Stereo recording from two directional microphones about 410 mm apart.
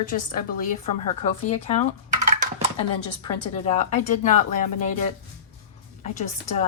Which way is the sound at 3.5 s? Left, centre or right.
Centre.